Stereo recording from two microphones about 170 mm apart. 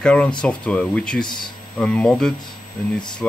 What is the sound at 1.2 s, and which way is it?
Speech, 25° left (ahead or behind).